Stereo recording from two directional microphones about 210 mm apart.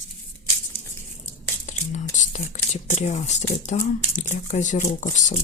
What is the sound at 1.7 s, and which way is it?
Speech, 35° left (ahead or behind).